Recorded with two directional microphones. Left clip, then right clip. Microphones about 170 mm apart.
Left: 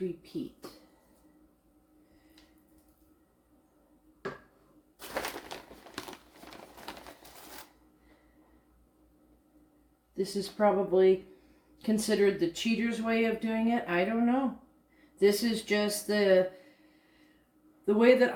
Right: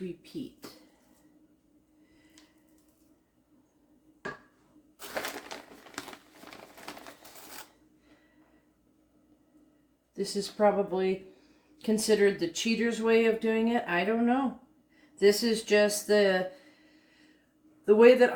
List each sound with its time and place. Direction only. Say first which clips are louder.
4.9 s bird: even; centre (ahead or behind)
6.0 s crumpling: right 1 dB; 5° left (ahead or behind)
10.2 s speech: right 1 dB; 35° right (ahead or behind)
17.8 s speech: right 4 dB; 25° right (ahead or behind)